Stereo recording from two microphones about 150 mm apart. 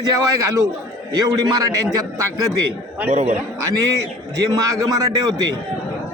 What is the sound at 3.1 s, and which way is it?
Speech, 50° right (ahead or behind).